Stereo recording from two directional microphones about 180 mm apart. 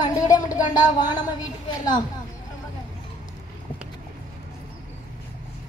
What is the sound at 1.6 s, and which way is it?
Speech, 20° left (ahead or behind).